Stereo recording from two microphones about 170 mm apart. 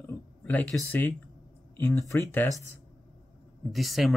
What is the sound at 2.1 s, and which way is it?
Speech, 15° left (ahead or behind).